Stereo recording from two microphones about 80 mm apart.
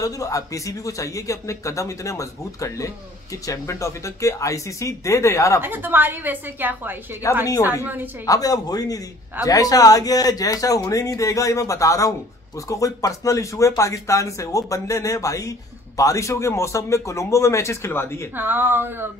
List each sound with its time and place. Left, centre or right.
0.0 s a man's voice: left
5.6 s a woman's voice: right
8.3 s a man's voice: left
18.3 s a woman's voice: right